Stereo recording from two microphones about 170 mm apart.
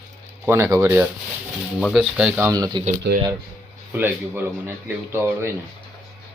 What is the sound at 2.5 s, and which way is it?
Speech, 25° right (ahead or behind).